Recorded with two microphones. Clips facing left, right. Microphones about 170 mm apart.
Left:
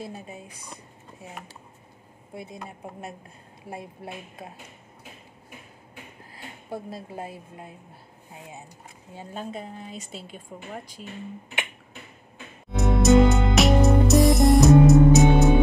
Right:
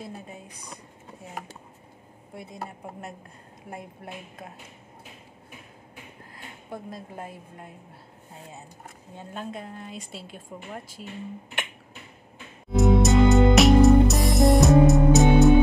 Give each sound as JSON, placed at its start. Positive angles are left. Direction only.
{"t": 3.7, "sound": "a woman's voice", "side_deg": 25}
{"t": 6.7, "sound": "a woman's voice", "side_deg": 30}
{"t": 9.1, "sound": "a woman's voice", "side_deg": 0}
{"t": 12.7, "sound": "music", "side_deg": 0}